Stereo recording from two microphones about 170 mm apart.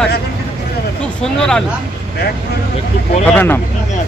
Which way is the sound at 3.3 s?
10° left (ahead or behind).